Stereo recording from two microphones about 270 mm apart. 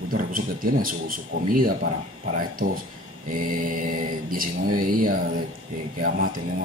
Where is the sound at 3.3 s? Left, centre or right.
Right.